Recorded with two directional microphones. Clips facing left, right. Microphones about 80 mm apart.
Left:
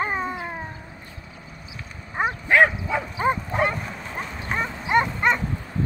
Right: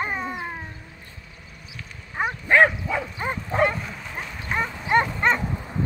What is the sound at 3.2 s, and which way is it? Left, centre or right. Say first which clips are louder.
Bow-wow: left 1 dB; centre.